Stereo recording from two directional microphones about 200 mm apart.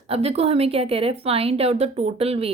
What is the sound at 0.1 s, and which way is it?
A woman's voice, 30° right (ahead or behind).